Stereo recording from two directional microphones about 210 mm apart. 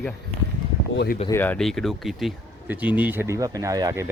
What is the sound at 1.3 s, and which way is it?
Speech, 10° left (ahead or behind).